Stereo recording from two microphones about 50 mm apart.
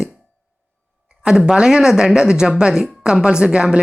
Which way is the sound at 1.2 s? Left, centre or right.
Centre.